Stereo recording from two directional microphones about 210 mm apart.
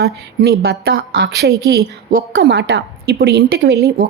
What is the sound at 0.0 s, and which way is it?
Speech, 50° right (ahead or behind).